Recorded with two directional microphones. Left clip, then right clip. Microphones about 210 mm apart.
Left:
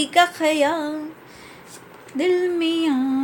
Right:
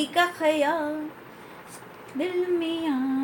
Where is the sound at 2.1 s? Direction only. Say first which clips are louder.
Left 6 dB; 60° left (ahead or behind).